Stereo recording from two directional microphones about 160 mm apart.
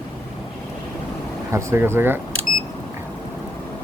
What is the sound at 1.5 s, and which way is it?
Speech, 15° right (ahead or behind).